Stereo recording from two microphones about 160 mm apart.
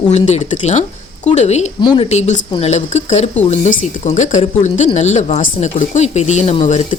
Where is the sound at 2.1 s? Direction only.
45° left (ahead or behind).